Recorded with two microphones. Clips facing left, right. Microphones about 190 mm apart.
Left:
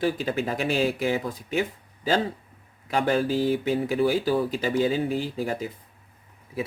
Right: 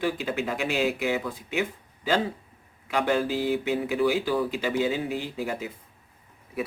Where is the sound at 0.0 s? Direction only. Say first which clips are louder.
Left 2 dB; 40° left (ahead or behind).